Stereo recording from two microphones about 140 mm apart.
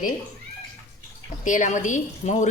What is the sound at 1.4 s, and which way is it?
A woman's voice, 65° left (ahead or behind).